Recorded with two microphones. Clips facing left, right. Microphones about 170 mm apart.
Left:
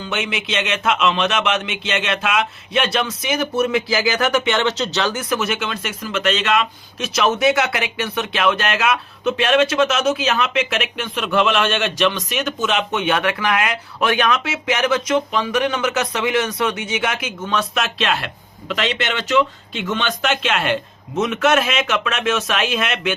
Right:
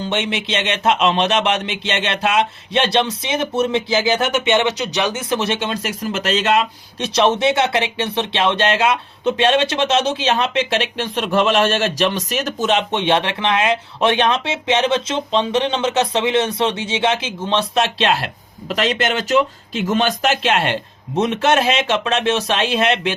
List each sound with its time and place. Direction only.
0.0 s speech: 35° right (ahead or behind); by 5.2 s 15° right (ahead or behind)
5.3 s speech: 30° right (ahead or behind)